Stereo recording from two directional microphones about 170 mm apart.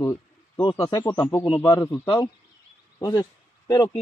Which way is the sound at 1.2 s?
10° left (ahead or behind).